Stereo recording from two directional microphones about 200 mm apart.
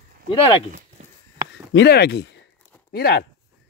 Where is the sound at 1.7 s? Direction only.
55° left (ahead or behind).